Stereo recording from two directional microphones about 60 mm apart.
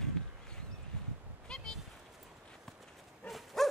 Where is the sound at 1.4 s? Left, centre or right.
Centre.